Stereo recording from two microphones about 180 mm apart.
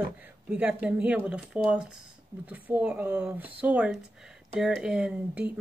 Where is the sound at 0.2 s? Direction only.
10° right (ahead or behind).